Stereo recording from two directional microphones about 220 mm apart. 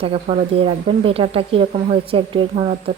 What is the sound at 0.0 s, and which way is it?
A woman's voice, 25° right (ahead or behind).